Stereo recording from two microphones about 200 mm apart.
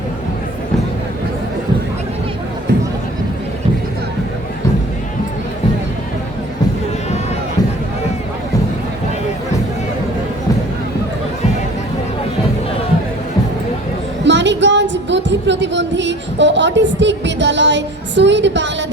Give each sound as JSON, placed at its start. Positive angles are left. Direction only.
{"t": 14.3, "sound": "music", "side_deg": -60}